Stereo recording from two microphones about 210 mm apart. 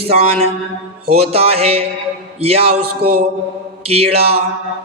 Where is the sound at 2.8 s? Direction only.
90° right.